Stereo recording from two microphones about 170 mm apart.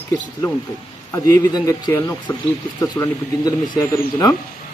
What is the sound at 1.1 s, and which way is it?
A man's voice, 20° left (ahead or behind).